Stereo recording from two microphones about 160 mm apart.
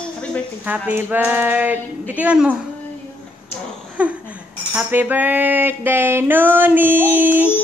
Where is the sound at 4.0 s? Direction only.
10° right (ahead or behind).